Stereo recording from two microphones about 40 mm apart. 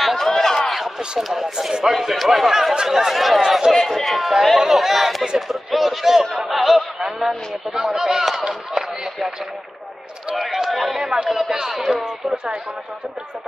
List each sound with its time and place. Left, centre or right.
0.0 s a sound: centre
0.7 s a sound: centre
1.1 s speech: centre
2.0 s speech: centre
2.7 s speech: centre
3.7 s speech: centre
10.3 s speech: centre